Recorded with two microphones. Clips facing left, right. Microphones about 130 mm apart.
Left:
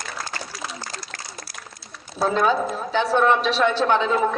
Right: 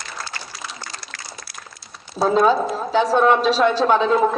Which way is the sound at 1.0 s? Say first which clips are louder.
Even; 40° left (ahead or behind).